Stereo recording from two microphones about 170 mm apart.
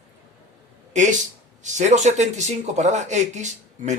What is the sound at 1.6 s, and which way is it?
Speech, 45° right (ahead or behind).